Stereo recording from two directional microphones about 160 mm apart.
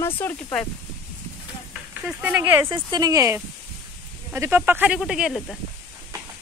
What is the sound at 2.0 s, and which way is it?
Speech, 10° right (ahead or behind).